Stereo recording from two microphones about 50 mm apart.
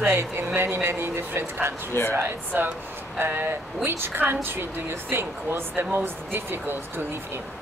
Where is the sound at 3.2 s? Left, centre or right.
Right.